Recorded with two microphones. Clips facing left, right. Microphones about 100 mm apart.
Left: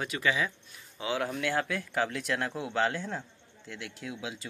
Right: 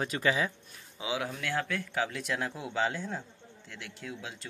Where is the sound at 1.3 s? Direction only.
Centre (ahead or behind).